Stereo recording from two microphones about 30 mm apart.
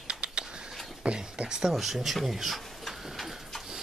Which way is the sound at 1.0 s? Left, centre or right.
Right.